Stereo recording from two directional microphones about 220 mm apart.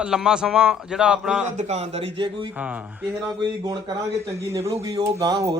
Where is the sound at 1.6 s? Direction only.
30° right (ahead or behind).